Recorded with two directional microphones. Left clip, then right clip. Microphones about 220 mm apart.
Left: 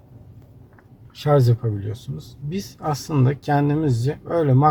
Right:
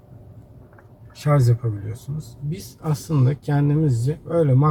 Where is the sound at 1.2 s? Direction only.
45° left (ahead or behind).